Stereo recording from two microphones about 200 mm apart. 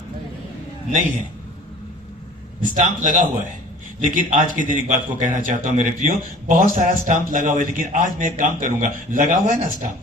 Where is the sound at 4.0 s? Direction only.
40° right (ahead or behind).